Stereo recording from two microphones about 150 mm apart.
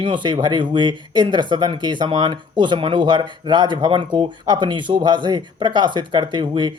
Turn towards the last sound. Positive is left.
turn(degrees=-30)  # may be behind; listen again after turning